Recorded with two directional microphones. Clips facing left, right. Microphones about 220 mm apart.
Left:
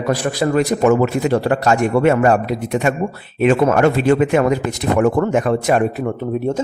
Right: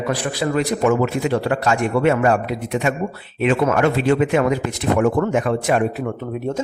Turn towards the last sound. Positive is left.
turn(degrees=30)  # may be behind; listen again after turning